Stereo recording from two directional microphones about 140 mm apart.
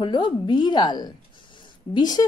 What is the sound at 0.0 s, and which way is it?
A woman's voice, 35° left (ahead or behind).